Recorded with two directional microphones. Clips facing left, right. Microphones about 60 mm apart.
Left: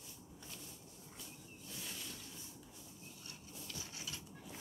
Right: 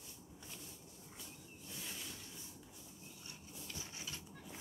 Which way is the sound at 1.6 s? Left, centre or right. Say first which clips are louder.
Even; centre.